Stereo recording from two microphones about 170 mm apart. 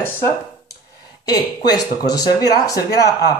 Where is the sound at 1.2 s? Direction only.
25° left (ahead or behind).